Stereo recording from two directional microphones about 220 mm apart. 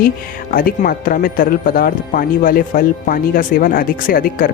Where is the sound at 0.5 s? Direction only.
40° left (ahead or behind).